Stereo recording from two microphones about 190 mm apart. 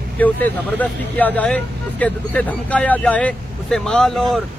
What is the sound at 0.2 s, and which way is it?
Speech, 10° left (ahead or behind).